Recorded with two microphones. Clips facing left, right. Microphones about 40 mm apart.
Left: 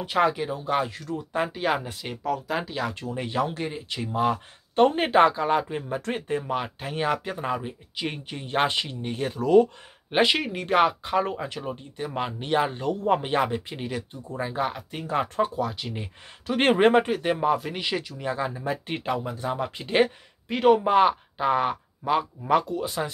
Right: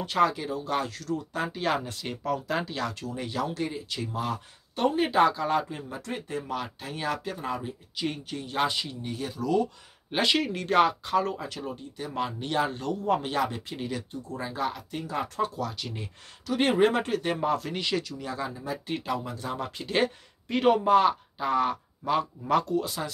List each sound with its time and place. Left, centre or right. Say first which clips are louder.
0.0 s speech: left 2 dB; left
1.5 s speech: left 2 dB; centre
2.9 s speech: left 3 dB; left
4.7 s speech: left 4 dB; left
10.1 s speech: left 3 dB; centre
15.0 s speech: left 6 dB; left
15.4 s speech: left 3 dB; left
16.4 s speech: left 3 dB; left
17.0 s speech: left 3 dB; centre
18.1 s speech: left 5 dB; left
20.5 s speech: left 3 dB; centre
20.8 s speech: left 1 dB; left